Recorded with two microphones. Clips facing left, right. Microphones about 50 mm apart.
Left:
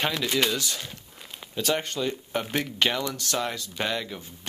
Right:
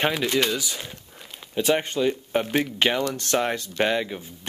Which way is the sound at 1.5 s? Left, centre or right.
Right.